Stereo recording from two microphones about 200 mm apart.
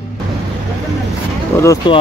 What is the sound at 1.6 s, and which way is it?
Speech, 15° left (ahead or behind).